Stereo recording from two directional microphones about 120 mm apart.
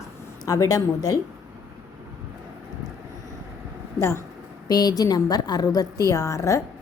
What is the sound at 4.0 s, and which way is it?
A woman's voice, 25° left (ahead or behind).